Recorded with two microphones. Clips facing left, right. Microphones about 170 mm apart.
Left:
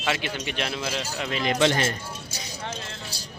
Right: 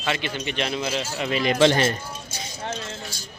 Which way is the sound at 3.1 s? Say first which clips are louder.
Left 1 dB; 35° left (ahead or behind).